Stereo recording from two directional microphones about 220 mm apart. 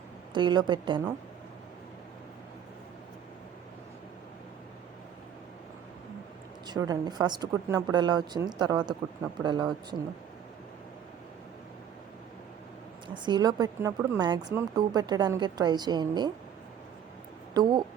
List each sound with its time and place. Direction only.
0.3 s speech: 20° right (ahead or behind)
6.7 s speech: 15° right (ahead or behind)
13.2 s speech: 20° right (ahead or behind)
17.5 s a woman's voice: 20° right (ahead or behind)